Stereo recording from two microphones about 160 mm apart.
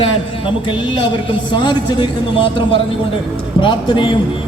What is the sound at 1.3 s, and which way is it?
A man's voice, 30° left (ahead or behind).